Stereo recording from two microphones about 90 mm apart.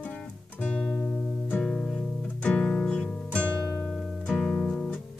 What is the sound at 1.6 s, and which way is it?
Music, 10° left (ahead or behind).